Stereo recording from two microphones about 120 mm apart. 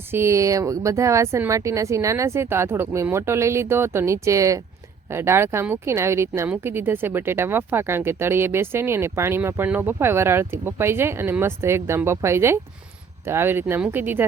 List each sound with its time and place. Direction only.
0.1 s speech: 20° right (ahead or behind)